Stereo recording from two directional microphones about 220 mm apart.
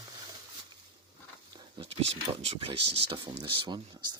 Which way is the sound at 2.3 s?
25° right (ahead or behind).